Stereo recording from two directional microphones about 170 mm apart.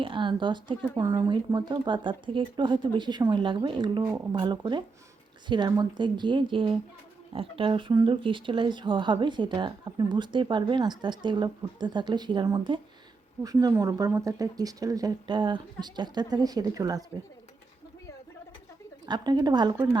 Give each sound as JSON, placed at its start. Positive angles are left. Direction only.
{"t": 0.0, "sound": "speech", "side_deg": -30}
{"t": 19.0, "sound": "speech", "side_deg": -25}
{"t": 19.7, "sound": "speech", "side_deg": -15}